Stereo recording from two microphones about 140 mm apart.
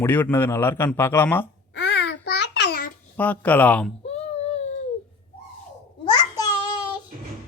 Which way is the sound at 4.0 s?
50° left (ahead or behind).